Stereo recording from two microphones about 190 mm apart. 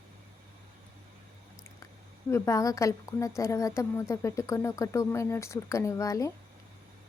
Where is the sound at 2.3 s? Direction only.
15° left (ahead or behind).